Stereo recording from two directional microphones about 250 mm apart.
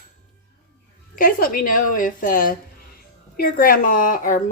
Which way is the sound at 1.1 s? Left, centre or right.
Left.